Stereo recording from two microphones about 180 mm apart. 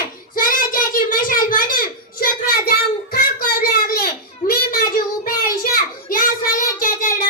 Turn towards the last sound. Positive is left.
turn(degrees=50)  # may be behind; listen again after turning